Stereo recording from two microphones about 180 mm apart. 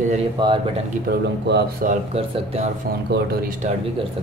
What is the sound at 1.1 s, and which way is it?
Speech, 65° right (ahead or behind).